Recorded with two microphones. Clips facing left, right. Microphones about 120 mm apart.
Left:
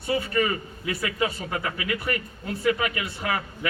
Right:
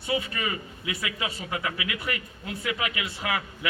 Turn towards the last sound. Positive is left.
turn(degrees=45)  # may be behind; listen again after turning